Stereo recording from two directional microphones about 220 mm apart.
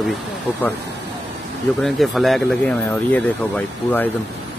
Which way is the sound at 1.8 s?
Centre (ahead or behind).